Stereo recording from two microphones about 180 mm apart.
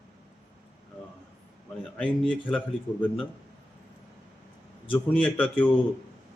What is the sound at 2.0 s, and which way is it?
Speech, 5° left (ahead or behind).